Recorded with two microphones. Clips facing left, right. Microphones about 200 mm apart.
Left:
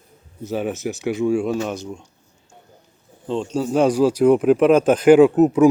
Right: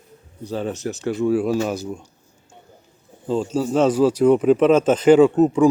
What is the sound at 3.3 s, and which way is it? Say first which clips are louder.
Speech: right 1 dB; 5° right (ahead or behind).